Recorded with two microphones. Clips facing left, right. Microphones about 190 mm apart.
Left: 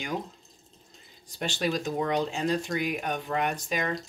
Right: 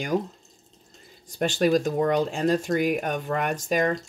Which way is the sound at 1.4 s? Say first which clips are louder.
Right 8 dB; 50° right (ahead or behind).